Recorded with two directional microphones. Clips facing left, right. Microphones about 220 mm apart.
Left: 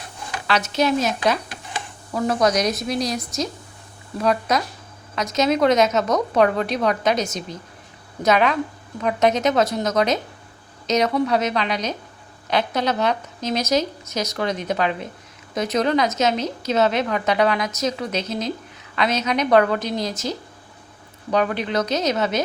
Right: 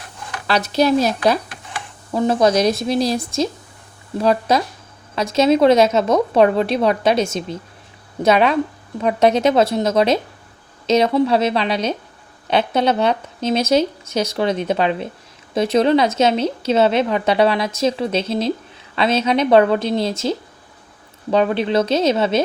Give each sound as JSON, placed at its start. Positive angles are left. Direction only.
{"t": 0.4, "sound": "a woman's voice", "side_deg": -35}